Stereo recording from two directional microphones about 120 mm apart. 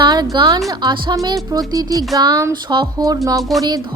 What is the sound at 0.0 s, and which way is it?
A woman's voice, 35° right (ahead or behind).